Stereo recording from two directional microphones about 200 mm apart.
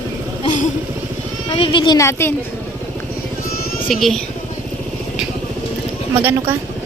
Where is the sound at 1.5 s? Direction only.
25° left (ahead or behind).